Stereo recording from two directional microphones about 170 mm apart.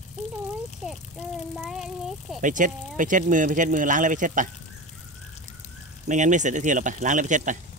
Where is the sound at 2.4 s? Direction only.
50° right (ahead or behind).